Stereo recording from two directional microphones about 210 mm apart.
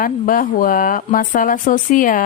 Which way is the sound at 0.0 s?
40° left (ahead or behind).